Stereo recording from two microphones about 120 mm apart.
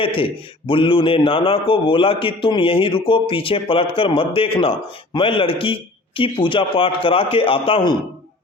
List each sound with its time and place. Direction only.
0.0 s a man's voice: 50° left (ahead or behind)